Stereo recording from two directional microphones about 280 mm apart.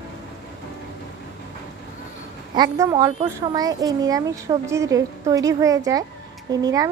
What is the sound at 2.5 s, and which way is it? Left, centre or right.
A woman's voice, centre.